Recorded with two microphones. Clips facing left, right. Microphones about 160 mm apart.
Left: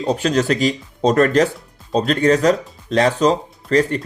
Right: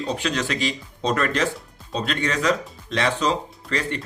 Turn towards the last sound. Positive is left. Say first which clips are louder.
# left 10 dB
turn(degrees=40)  # may be behind; listen again after turning